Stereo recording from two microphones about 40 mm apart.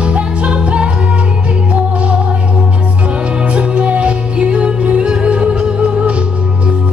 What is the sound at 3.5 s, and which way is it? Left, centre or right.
Music, right.